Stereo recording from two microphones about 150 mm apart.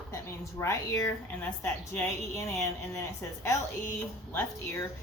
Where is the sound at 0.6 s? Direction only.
20° left (ahead or behind).